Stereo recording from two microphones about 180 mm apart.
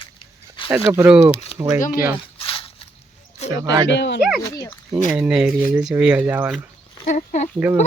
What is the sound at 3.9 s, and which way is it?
Speech, 75° left (ahead or behind).